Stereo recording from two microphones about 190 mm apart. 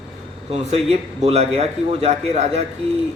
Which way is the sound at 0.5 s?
35° right (ahead or behind).